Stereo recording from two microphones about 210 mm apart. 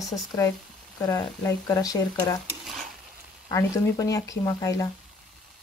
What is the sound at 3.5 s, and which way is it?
A woman's voice, 15° left (ahead or behind).